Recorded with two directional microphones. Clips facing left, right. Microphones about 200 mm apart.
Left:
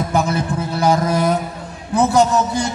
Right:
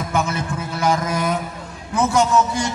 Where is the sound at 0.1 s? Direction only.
35° left (ahead or behind).